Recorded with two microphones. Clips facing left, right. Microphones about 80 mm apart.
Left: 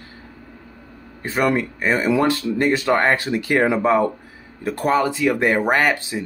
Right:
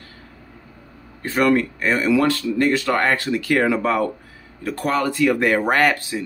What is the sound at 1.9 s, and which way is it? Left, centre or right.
Speech, left.